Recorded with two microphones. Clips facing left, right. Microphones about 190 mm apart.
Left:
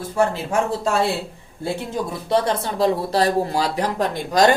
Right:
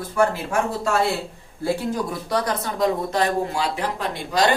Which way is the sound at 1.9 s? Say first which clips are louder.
Left 3 dB; 25° left (ahead or behind).